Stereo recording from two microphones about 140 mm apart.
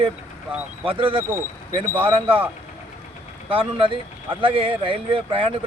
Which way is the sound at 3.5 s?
40° right (ahead or behind).